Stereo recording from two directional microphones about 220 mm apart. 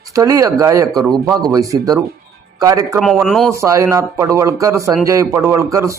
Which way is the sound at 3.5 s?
15° right (ahead or behind).